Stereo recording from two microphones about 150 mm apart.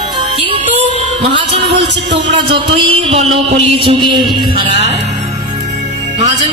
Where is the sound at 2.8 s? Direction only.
40° right (ahead or behind).